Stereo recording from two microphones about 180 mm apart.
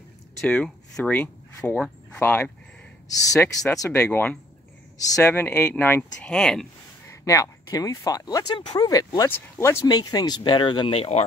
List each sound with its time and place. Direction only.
0.4 s speech: 5° left (ahead or behind)
7.1 s speech: 15° left (ahead or behind); by 11.2 s 35° left (ahead or behind)